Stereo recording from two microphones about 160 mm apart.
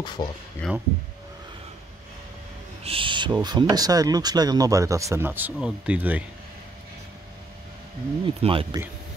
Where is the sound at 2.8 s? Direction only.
35° right (ahead or behind).